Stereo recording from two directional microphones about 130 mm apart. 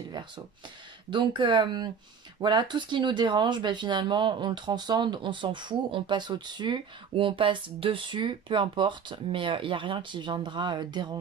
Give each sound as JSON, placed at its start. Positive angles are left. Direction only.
{"t": 1.1, "sound": "speech", "side_deg": -35}